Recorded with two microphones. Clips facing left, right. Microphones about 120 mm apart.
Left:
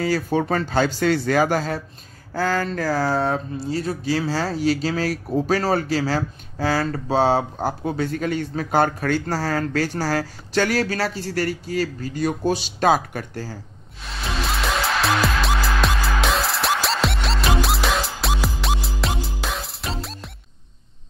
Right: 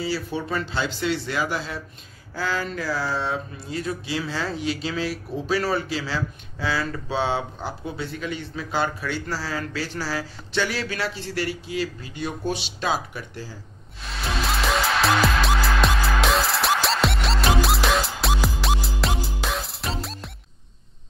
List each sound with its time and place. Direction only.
0.0 s speech: 50° left (ahead or behind)
3.5 s speech: 35° left (ahead or behind)
14.0 s music: centre (ahead or behind)